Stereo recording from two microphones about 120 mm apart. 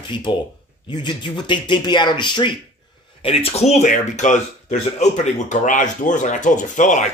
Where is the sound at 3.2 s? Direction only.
55° left (ahead or behind); by 7.1 s 90° left.